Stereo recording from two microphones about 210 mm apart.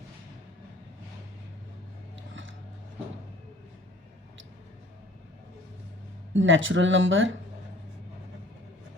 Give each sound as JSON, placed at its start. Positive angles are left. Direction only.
{"t": 6.3, "sound": "speech", "side_deg": -65}